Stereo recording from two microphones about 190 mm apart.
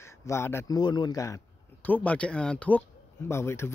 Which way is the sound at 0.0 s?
15° left (ahead or behind).